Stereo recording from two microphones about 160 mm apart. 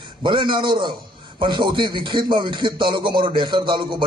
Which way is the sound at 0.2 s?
30° right (ahead or behind).